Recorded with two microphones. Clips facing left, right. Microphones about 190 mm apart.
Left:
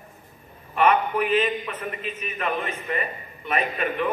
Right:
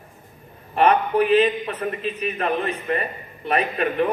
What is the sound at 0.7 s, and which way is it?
A man's voice, 35° right (ahead or behind).